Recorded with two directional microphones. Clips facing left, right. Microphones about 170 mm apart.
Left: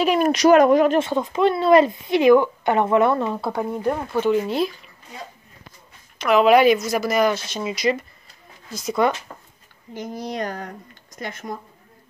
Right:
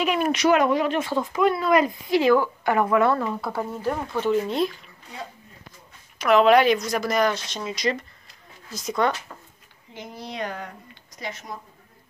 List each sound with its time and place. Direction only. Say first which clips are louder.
0.0 s speech: left 5 dB; 40° left (ahead or behind)
0.9 s speech: left 4 dB; 20° left (ahead or behind)
3.5 s speech: left 5 dB; 15° left (ahead or behind)
4.1 s speech: left 2 dB; 5° left (ahead or behind)
6.1 s speech: left 2 dB; 5° left (ahead or behind)
9.3 s a sound: left 1 dB; 20° left (ahead or behind)
9.9 s speech: left 5 dB; 40° left (ahead or behind)